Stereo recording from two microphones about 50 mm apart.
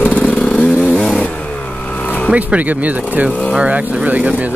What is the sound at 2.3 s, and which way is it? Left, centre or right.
Speech, right.